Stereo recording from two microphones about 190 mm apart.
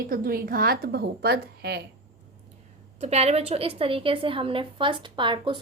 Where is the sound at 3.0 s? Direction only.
35° right (ahead or behind).